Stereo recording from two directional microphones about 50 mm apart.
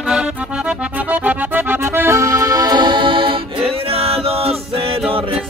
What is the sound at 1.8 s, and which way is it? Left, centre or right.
Accordion, right.